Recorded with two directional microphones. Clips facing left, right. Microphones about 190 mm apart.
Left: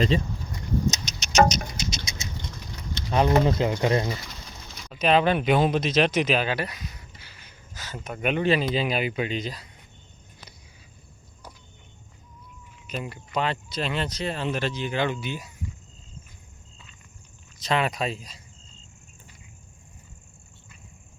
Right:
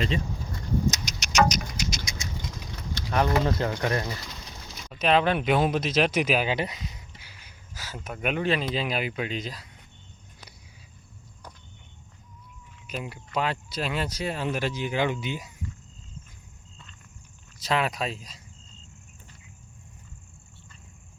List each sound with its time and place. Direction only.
0.1 s speech: 35° left (ahead or behind)
0.5 s a sound: 20° left (ahead or behind)
3.1 s speech: 20° left (ahead or behind)
4.9 s speech: centre (ahead or behind)
12.9 s speech: 5° right (ahead or behind)
17.6 s speech: 5° right (ahead or behind)